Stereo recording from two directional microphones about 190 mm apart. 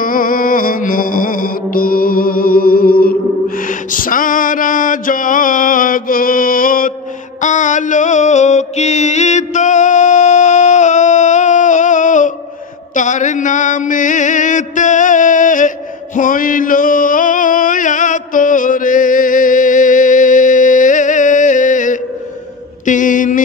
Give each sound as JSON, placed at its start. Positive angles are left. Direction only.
{"t": 0.0, "sound": "music", "side_deg": 45}
{"t": 12.9, "sound": "mantra", "side_deg": 40}
{"t": 16.2, "sound": "music", "side_deg": 45}
{"t": 22.8, "sound": "a sound", "side_deg": 45}